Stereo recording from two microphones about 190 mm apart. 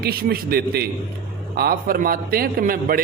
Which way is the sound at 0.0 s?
55° right (ahead or behind).